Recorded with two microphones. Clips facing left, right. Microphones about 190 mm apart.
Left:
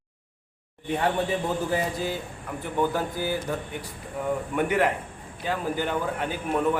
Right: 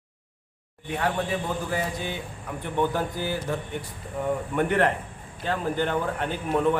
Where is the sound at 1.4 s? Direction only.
Centre (ahead or behind).